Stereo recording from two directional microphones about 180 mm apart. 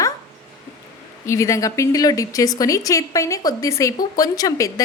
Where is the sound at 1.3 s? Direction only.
15° left (ahead or behind).